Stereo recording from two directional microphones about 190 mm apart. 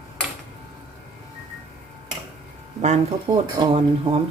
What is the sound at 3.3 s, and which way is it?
Speech, 25° right (ahead or behind).